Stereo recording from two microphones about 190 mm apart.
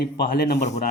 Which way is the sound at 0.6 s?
40° left (ahead or behind).